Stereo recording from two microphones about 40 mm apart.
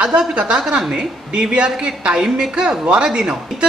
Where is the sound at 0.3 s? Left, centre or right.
Right.